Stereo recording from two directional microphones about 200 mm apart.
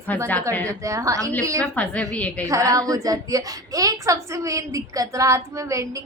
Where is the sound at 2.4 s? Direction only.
15° right (ahead or behind).